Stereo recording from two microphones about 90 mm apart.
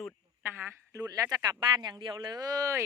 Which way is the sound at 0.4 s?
25° right (ahead or behind).